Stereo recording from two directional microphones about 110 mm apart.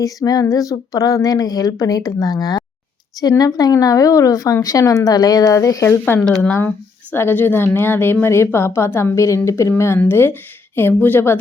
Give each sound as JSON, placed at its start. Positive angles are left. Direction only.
{"t": 0.0, "sound": "speech", "side_deg": 30}
{"t": 6.4, "sound": "speech", "side_deg": 15}